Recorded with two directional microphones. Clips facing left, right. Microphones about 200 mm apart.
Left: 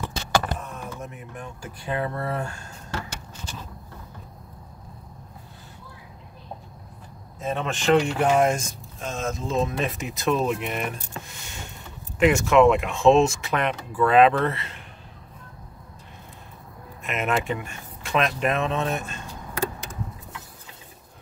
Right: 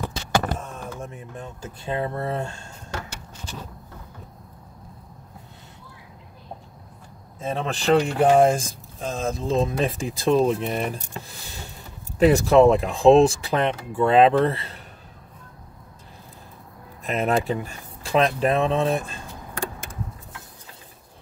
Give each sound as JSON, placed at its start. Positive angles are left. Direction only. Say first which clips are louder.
{"t": 0.6, "sound": "a sound", "louder": "right 1 dB", "side_deg": -30}
{"t": 7.3, "sound": "speech", "louder": "right 1 dB", "side_deg": -30}
{"t": 17.0, "sound": "speech", "louder": "right 3 dB", "side_deg": -35}